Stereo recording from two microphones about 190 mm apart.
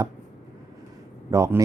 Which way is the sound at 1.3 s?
15° right (ahead or behind).